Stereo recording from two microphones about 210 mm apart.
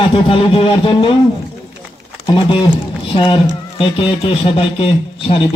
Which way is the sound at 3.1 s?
25° left (ahead or behind).